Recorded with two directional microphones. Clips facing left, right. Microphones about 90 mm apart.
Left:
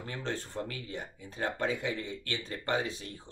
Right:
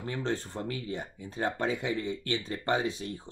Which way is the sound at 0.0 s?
25° right (ahead or behind).